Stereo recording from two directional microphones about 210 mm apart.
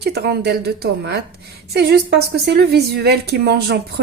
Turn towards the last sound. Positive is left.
turn(degrees=-50)  # may be behind; listen again after turning